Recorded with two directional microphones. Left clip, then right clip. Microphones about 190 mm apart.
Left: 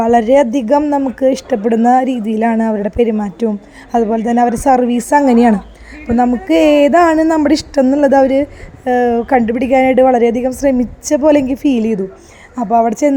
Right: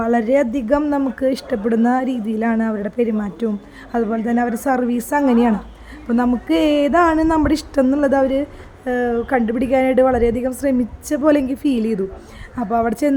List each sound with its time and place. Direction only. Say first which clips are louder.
0.0 s speech: left 7 dB; 20° left (ahead or behind)